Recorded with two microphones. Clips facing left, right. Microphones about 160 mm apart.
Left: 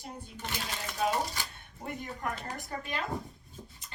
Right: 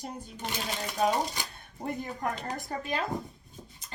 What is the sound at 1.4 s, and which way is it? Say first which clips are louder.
Speech: right 2 dB; 15° right (ahead or behind).